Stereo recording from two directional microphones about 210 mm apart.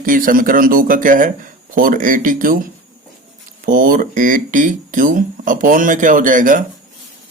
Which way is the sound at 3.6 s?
40° right (ahead or behind).